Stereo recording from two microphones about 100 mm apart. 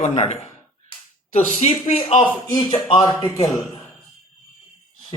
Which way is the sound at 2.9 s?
50° left (ahead or behind).